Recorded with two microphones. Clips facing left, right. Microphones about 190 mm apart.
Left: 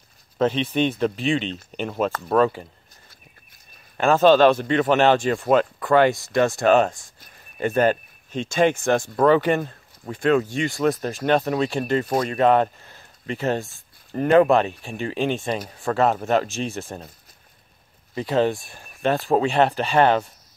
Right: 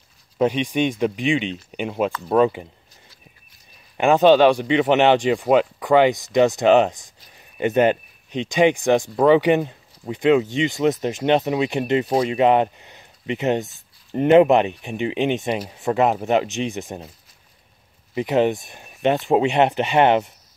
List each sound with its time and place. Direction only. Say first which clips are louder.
0.4 s speech: right 1 dB; 15° right (ahead or behind)
3.9 s speech: right 2 dB; 15° right (ahead or behind)
18.1 s speech: right 2 dB; 20° right (ahead or behind)